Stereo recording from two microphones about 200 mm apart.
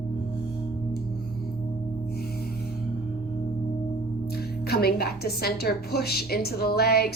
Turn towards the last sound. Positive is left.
turn(degrees=50)  # may be behind; listen again after turning